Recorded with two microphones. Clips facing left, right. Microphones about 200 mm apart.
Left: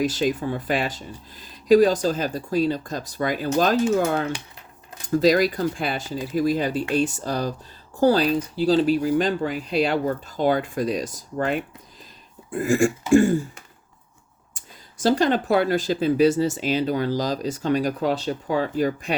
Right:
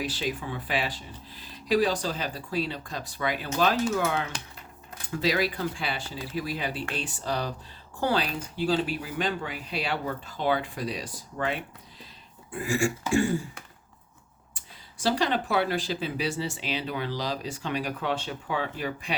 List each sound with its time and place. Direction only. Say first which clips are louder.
0.0 s speech: left 9 dB; 45° left (ahead or behind)
14.5 s speech: left 3 dB; 45° left (ahead or behind)